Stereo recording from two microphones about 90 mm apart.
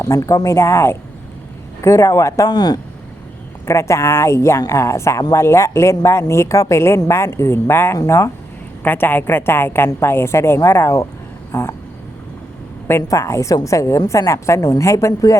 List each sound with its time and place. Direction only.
0.0 s a woman's voice: 40° left (ahead or behind)
2.5 s speech: 50° left (ahead or behind)
3.7 s a woman's voice: 30° left (ahead or behind)
8.8 s a woman's voice: 20° left (ahead or behind); by 11.7 s 40° left (ahead or behind)
13.0 s a woman's voice: 40° left (ahead or behind)